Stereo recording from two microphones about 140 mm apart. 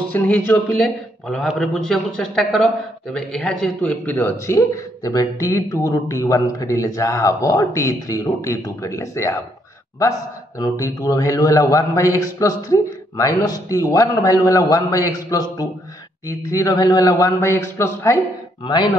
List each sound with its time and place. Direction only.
0.1 s a man's voice: 10° left (ahead or behind)
10.6 s a man's voice: 25° left (ahead or behind)